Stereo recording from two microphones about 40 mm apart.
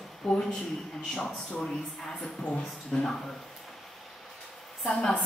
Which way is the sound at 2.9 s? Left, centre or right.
Centre.